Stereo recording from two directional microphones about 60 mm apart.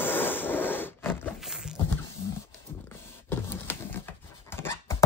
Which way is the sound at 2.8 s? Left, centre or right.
Left.